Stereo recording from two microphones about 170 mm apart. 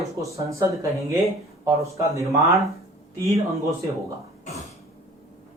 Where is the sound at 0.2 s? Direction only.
20° right (ahead or behind).